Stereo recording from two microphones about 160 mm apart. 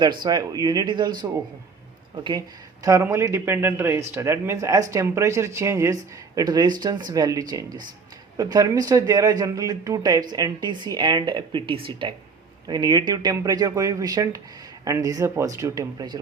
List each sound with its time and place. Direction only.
0.0 s speech: 30° right (ahead or behind)
2.8 s speech: 20° right (ahead or behind)